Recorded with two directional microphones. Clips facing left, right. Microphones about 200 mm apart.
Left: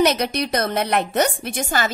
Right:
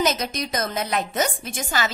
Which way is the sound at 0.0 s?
65° left (ahead or behind).